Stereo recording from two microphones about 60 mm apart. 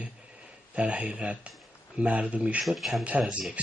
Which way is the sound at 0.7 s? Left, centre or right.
Centre.